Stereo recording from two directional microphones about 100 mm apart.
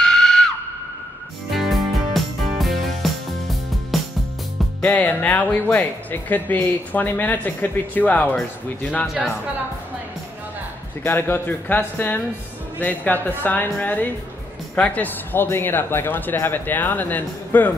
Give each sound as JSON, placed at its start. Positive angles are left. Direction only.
{"t": 0.0, "sound": "screaming", "side_deg": 5}
{"t": 1.5, "sound": "music", "side_deg": 0}
{"t": 4.8, "sound": "speech", "side_deg": 15}
{"t": 9.0, "sound": "speech", "side_deg": -5}
{"t": 11.1, "sound": "speech", "side_deg": 20}